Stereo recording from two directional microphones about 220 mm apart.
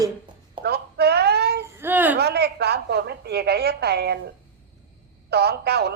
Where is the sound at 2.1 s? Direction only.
45° right (ahead or behind).